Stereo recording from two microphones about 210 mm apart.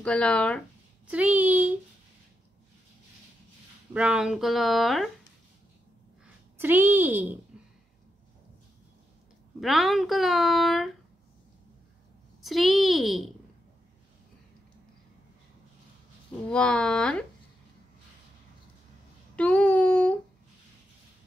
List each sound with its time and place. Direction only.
0.0 s speech: 5° left (ahead or behind)
1.0 s a woman's voice: 5° right (ahead or behind)
3.9 s speech: 5° right (ahead or behind)
6.6 s a woman's voice: 10° right (ahead or behind)
7.5 s a sound: 5° right (ahead or behind)
9.6 s speech: centre (ahead or behind)
12.4 s speech: centre (ahead or behind)
16.4 s speech: 5° left (ahead or behind)
19.3 s a sound: 5° left (ahead or behind)